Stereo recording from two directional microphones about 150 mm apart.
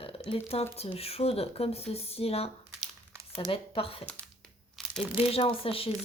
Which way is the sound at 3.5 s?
40° left (ahead or behind).